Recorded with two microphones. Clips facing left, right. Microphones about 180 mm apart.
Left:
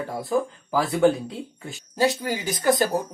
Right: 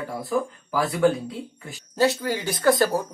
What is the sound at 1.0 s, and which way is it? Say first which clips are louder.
Speech: left 1 dB; 25° left (ahead or behind).